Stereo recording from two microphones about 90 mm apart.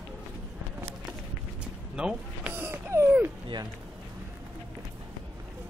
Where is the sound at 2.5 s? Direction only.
25° right (ahead or behind).